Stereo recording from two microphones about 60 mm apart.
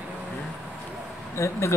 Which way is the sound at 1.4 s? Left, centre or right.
Left.